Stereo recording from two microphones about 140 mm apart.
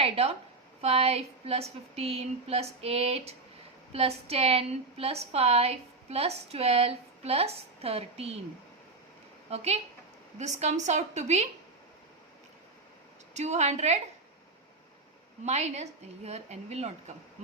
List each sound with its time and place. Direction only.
0.0 s a woman's voice: 45° right (ahead or behind)
9.5 s a woman's voice: 50° right (ahead or behind)
13.3 s a woman's voice: 55° right (ahead or behind)
15.4 s a woman's voice: 55° right (ahead or behind)